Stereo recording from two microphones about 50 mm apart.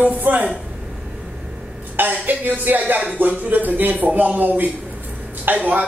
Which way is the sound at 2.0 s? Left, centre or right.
Right.